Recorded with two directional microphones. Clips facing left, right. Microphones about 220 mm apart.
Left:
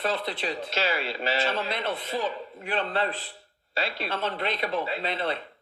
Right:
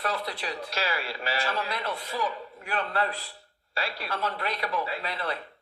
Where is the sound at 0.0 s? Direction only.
25° left (ahead or behind).